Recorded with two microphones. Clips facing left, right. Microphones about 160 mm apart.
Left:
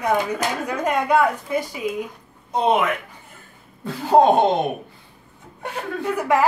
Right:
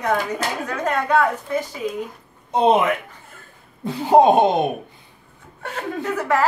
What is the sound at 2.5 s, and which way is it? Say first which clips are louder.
Speech: right 3 dB; 25° right (ahead or behind).